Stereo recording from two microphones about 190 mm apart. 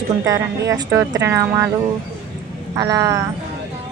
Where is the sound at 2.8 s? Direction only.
20° right (ahead or behind).